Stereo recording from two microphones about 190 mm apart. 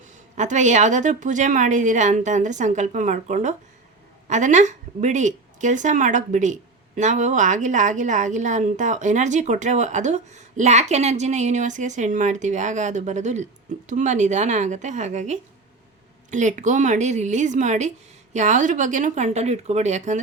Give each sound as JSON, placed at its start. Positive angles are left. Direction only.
{"t": 0.3, "sound": "speech", "side_deg": -40}